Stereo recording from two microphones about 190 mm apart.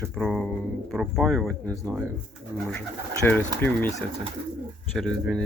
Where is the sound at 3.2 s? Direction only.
10° left (ahead or behind).